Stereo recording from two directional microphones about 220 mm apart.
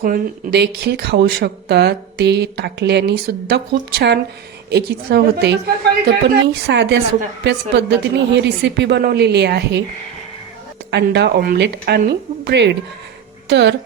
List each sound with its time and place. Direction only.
0.0 s speech: 45° right (ahead or behind)
10.9 s speech: 50° right (ahead or behind)